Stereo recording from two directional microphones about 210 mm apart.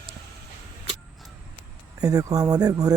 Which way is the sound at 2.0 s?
15° right (ahead or behind).